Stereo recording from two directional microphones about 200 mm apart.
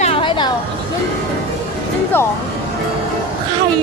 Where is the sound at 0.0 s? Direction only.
25° left (ahead or behind).